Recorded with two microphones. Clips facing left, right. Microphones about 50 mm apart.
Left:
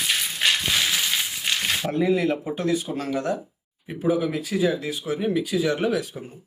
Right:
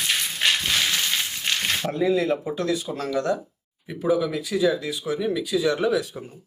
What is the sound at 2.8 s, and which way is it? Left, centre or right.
Speech, centre.